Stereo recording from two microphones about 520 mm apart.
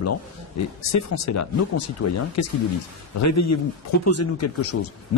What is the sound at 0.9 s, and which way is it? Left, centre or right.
Speech, left.